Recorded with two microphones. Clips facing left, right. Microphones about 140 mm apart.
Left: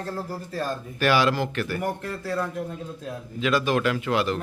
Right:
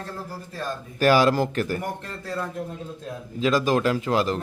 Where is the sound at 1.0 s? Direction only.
40° right (ahead or behind).